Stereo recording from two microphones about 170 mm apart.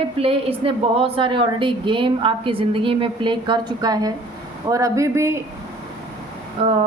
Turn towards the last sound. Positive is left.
turn(degrees=-35)  # may be behind; listen again after turning